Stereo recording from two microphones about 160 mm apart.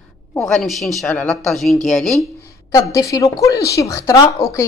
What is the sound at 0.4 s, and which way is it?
Speech, centre (ahead or behind).